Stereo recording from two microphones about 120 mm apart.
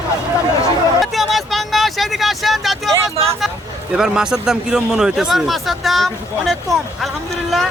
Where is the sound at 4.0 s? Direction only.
5° right (ahead or behind).